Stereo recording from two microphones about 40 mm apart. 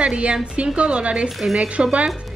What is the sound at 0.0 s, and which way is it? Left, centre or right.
A woman's voice, right.